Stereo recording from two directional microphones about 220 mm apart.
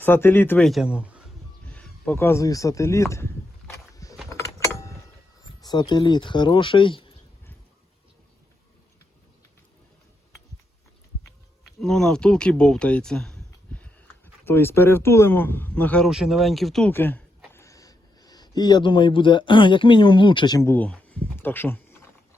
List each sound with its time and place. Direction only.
0.0 s a man's voice: 10° left (ahead or behind)
1.6 s a sound: 5° left (ahead or behind)
5.6 s speech: 20° left (ahead or behind)
11.8 s speech: centre (ahead or behind)